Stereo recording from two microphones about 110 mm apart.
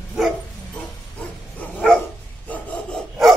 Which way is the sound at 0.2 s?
5° right (ahead or behind).